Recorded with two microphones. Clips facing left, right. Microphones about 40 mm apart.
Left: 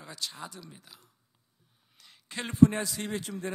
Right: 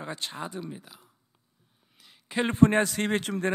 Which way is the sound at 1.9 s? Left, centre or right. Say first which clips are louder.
Right 2 dB; centre.